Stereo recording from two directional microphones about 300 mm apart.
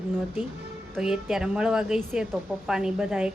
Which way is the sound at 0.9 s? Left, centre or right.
Centre.